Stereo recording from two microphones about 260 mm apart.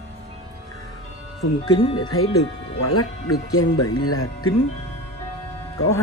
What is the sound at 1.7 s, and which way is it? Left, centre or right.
Speech, centre.